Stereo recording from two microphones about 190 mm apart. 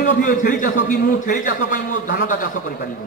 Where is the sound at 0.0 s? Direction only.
45° left (ahead or behind).